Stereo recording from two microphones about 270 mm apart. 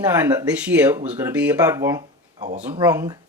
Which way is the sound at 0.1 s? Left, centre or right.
Centre.